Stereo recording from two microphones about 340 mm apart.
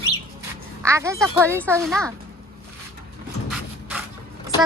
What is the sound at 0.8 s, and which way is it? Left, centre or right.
Speech, centre.